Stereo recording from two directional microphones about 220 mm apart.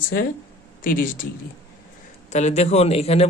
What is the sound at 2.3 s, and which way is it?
Speech, 30° left (ahead or behind).